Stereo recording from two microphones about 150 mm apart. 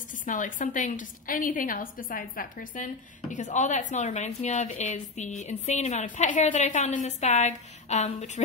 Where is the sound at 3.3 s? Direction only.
55° left (ahead or behind).